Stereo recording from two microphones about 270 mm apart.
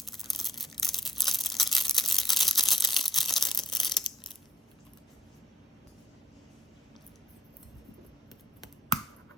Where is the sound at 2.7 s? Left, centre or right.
Centre.